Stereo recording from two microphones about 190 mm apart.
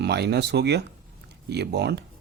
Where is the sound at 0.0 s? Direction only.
60° right (ahead or behind).